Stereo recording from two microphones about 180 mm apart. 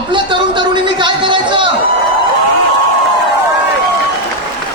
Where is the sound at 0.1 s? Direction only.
25° right (ahead or behind).